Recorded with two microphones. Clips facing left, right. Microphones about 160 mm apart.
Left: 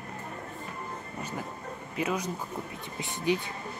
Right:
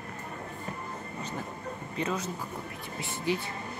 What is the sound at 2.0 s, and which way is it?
Speech, 10° left (ahead or behind).